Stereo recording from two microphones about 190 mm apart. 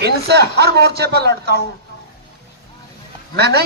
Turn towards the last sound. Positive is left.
turn(degrees=-60)  # may be behind; listen again after turning